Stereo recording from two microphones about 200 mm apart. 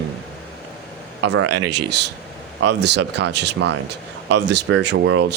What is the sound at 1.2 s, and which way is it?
Speech, 60° right (ahead or behind).